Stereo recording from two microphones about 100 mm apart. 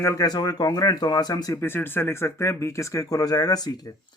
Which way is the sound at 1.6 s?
20° left (ahead or behind).